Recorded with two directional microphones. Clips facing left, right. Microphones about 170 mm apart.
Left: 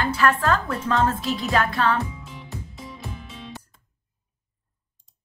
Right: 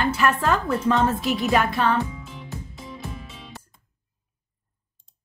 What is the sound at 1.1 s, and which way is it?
Speech, centre (ahead or behind).